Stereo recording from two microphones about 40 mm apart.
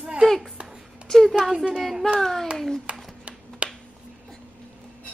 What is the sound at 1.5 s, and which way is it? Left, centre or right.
Speech, right.